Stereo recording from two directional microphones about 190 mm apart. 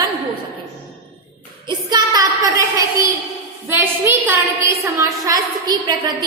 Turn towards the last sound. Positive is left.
turn(degrees=-20)  # may be behind; listen again after turning